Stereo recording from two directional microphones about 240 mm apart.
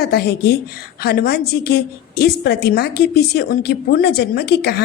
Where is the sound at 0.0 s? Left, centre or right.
Left.